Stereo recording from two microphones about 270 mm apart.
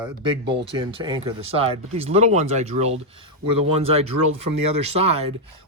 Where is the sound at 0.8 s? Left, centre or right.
Centre.